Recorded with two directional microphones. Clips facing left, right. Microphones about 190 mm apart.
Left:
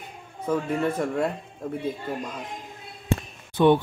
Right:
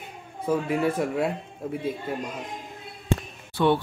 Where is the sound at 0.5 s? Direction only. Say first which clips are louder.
Right 1 dB; 5° right (ahead or behind).